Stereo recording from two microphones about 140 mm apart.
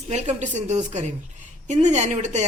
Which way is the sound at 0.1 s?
55° right (ahead or behind).